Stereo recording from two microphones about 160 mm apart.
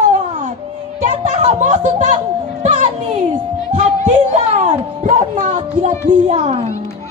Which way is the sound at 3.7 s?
50° right (ahead or behind).